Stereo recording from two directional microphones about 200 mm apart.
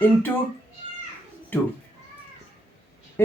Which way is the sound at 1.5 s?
10° left (ahead or behind).